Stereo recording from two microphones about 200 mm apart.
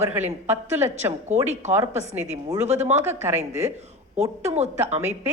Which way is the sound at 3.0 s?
10° right (ahead or behind).